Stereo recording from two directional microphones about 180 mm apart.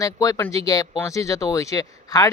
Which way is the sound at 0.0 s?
20° left (ahead or behind).